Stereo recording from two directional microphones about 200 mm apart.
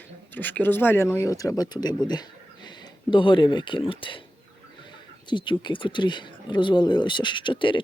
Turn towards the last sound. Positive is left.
turn(degrees=25)  # may be behind; listen again after turning